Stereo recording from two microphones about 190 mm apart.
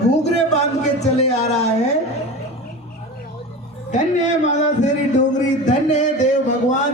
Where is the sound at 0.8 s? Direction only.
35° left (ahead or behind).